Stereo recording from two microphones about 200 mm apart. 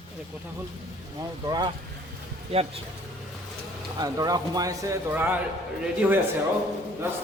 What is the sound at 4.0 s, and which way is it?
A man's voice, 20° right (ahead or behind).